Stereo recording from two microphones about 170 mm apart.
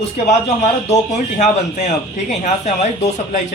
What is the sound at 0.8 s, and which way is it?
Speech, 45° left (ahead or behind).